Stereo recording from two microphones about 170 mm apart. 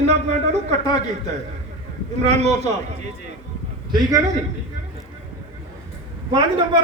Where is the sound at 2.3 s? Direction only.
40° right (ahead or behind).